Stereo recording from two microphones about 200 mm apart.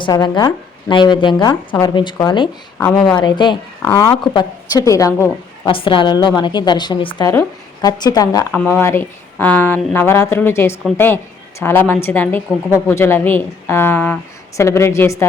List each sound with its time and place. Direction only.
0.0 s a woman's voice: 20° left (ahead or behind)